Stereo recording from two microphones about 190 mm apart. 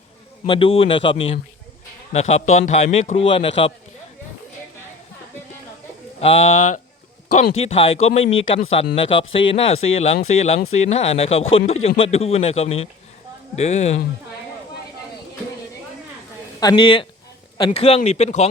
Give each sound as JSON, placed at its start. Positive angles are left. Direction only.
{"t": 0.4, "sound": "a man's voice", "side_deg": 30}
{"t": 6.1, "sound": "a man's voice", "side_deg": 30}
{"t": 16.6, "sound": "a man's voice", "side_deg": 20}